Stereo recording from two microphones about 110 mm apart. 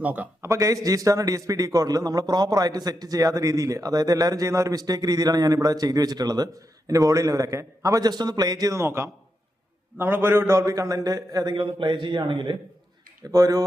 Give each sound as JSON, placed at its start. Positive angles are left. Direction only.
{"t": 0.0, "sound": "a man's voice", "side_deg": -15}
{"t": 0.4, "sound": "a man's voice", "side_deg": -30}
{"t": 11.5, "sound": "a man's voice", "side_deg": -50}
{"t": 13.3, "sound": "a man's voice", "side_deg": -30}